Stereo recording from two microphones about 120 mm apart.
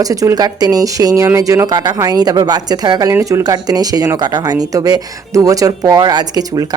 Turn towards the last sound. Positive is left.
turn(degrees=-35)  # may be behind; listen again after turning